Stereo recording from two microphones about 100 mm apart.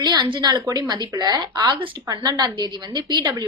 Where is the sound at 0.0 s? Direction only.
45° right (ahead or behind).